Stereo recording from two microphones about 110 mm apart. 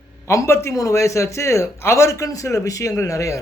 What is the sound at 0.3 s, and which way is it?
A man's voice, 25° left (ahead or behind).